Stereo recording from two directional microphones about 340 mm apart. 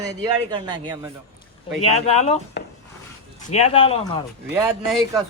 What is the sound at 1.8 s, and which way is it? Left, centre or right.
Speech, centre.